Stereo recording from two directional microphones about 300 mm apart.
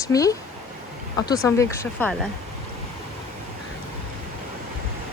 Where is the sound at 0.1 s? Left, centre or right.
Centre.